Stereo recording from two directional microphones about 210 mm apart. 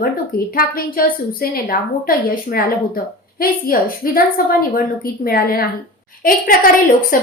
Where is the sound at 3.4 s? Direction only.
45° left (ahead or behind).